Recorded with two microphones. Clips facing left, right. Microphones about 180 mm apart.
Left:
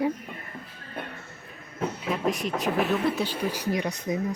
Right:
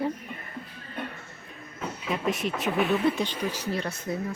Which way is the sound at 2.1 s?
Centre (ahead or behind).